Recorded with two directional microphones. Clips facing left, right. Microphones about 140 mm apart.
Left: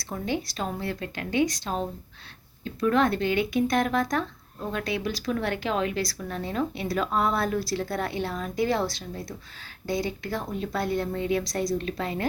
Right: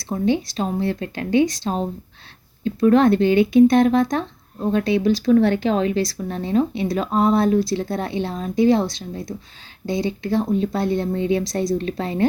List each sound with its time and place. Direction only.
0.0 s speech: 25° right (ahead or behind)